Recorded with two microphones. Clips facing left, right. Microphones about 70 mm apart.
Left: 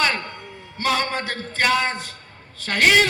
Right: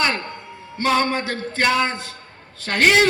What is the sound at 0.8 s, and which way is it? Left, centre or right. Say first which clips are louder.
Speech: right 3 dB; right.